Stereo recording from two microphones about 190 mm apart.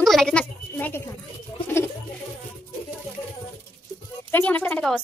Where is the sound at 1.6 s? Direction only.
10° left (ahead or behind).